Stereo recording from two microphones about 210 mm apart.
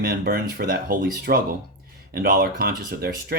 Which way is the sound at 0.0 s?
45° right (ahead or behind).